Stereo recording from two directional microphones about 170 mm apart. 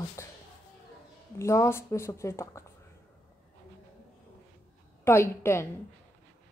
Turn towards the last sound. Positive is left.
turn(degrees=15)  # may be behind; listen again after turning